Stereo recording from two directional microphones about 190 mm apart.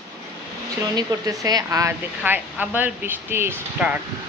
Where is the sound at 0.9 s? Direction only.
20° right (ahead or behind).